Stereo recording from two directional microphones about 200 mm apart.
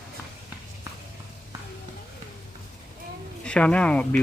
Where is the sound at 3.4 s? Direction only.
5° left (ahead or behind).